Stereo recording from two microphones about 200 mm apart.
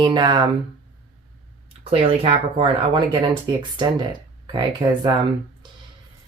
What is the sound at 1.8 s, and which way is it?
Speech, 30° right (ahead or behind).